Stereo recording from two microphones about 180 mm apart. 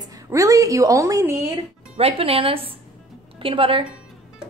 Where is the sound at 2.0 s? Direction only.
35° right (ahead or behind).